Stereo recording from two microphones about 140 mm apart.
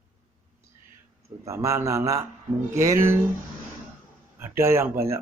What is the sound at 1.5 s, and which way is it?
Speech, 20° right (ahead or behind).